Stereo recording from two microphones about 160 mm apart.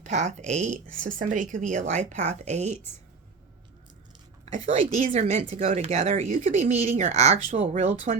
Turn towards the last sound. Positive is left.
turn(degrees=-40)  # may be behind; listen again after turning